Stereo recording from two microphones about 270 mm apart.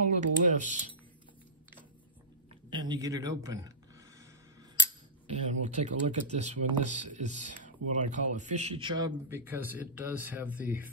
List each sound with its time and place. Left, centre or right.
0.2 s typing: right
2.7 s speech: centre
5.2 s speech: right; by 10.9 s centre